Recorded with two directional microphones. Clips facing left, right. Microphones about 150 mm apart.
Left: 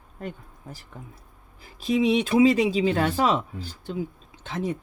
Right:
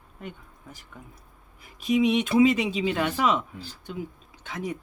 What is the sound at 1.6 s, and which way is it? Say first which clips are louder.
Speech: even; 30° left (ahead or behind).